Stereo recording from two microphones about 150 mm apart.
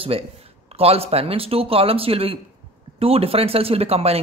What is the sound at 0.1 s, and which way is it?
Speech, 40° right (ahead or behind).